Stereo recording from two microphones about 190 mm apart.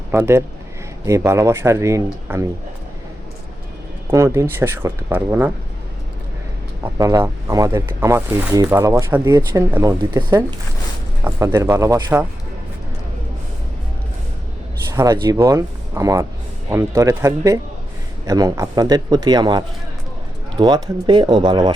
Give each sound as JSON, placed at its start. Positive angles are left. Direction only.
{"t": 0.1, "sound": "speech", "side_deg": -10}
{"t": 4.1, "sound": "speech", "side_deg": -15}
{"t": 7.0, "sound": "a man's voice", "side_deg": -20}
{"t": 14.9, "sound": "a man's voice", "side_deg": -15}